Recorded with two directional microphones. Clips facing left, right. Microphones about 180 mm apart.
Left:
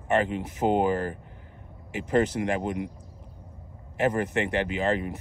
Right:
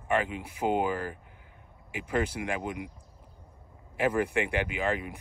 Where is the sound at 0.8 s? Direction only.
45° left (ahead or behind).